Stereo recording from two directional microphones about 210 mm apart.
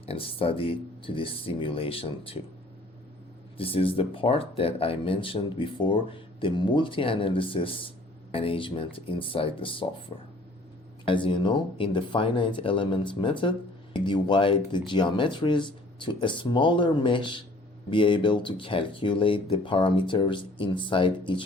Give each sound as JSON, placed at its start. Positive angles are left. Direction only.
{"t": 0.0, "sound": "speech", "side_deg": 25}
{"t": 3.6, "sound": "speech", "side_deg": 25}